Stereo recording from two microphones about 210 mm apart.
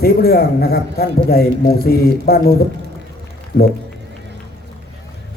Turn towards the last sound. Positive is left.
turn(degrees=45)  # may be behind; listen again after turning